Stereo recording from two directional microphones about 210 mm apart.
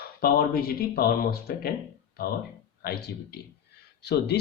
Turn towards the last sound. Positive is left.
turn(degrees=50)  # may be behind; listen again after turning